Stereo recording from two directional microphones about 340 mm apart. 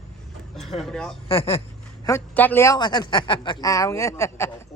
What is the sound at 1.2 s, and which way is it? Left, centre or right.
Speech, centre.